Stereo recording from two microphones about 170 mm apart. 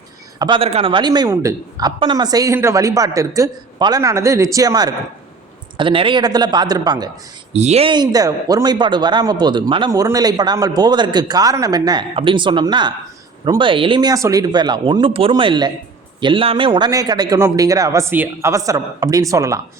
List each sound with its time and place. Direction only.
0.3 s speech: 25° right (ahead or behind)
7.5 s speech: 40° right (ahead or behind); by 19.5 s 20° right (ahead or behind)